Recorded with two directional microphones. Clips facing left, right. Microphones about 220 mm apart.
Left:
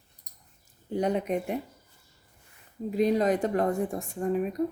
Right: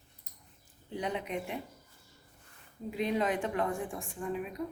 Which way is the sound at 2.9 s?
40° left (ahead or behind).